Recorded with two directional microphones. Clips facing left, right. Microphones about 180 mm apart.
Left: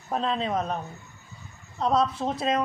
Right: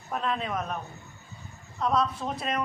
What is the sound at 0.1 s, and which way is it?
Speech, 30° left (ahead or behind).